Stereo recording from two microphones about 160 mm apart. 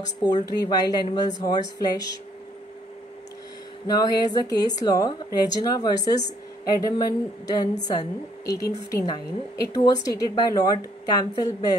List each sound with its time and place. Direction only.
0.3 s a woman's voice: 25° left (ahead or behind)
3.8 s a woman's voice: 25° left (ahead or behind)